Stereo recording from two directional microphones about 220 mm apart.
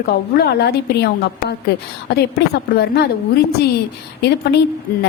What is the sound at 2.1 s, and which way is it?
A woman's voice, 45° left (ahead or behind).